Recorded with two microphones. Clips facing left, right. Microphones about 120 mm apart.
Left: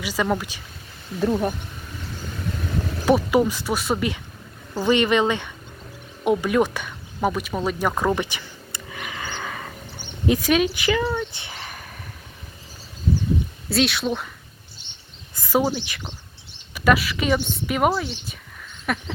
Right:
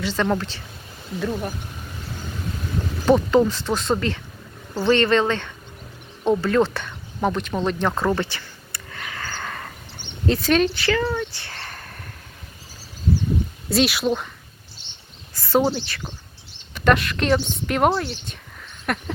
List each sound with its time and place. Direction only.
0.0 s speech: 10° left (ahead or behind)
1.3 s speech: 25° left (ahead or behind)
3.1 s speech: 10° left (ahead or behind)
9.4 s a sound: 5° left (ahead or behind)
10.2 s speech: 10° left (ahead or behind)
11.3 s a sound: 20° left (ahead or behind)
13.7 s a woman's voice: centre (ahead or behind)
15.4 s a woman's voice: 10° left (ahead or behind)